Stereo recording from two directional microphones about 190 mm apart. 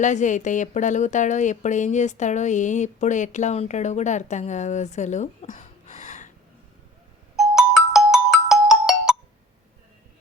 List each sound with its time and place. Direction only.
0.0 s a woman's voice: 40° left (ahead or behind)
7.3 s ringtone: centre (ahead or behind)